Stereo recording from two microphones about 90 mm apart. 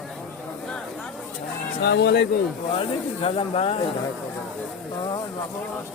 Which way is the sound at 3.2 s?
90° left.